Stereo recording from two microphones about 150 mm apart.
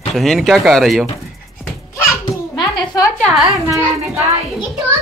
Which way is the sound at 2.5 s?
25° left (ahead or behind).